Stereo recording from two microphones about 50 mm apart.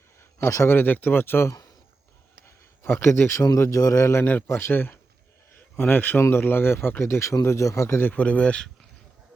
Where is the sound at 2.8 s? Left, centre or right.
Left.